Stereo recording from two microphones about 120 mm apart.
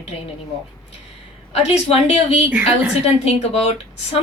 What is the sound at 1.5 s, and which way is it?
Speech, 55° left (ahead or behind).